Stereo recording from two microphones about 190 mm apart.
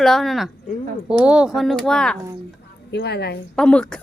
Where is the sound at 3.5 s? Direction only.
5° left (ahead or behind).